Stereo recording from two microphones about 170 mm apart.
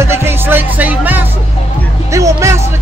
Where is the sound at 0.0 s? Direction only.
15° right (ahead or behind).